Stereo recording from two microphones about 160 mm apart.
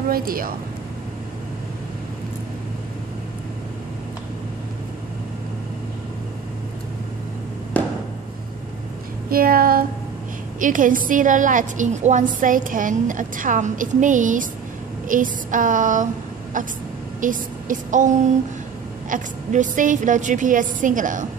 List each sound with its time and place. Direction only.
0.1 s a woman's voice: 65° right (ahead or behind)
9.3 s child singing: 65° right (ahead or behind)
10.6 s a woman's voice: 55° right (ahead or behind)